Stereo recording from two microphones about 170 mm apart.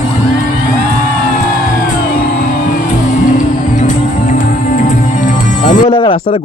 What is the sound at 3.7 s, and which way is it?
Music, 45° left (ahead or behind).